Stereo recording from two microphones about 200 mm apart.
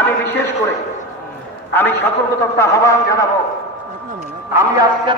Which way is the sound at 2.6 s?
15° left (ahead or behind).